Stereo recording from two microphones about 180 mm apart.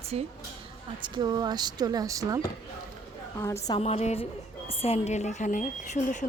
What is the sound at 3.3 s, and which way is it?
Speech, 15° left (ahead or behind).